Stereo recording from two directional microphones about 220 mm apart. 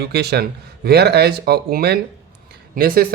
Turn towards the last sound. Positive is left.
turn(degrees=-40)  # may be behind; listen again after turning